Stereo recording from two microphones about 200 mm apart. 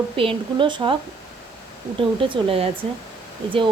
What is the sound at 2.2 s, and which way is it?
Speech, 25° right (ahead or behind).